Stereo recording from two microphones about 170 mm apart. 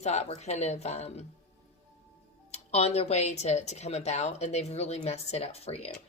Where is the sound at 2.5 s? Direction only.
40° left (ahead or behind).